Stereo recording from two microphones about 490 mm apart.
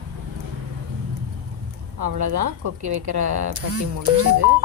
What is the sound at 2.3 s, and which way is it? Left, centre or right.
Speech, right.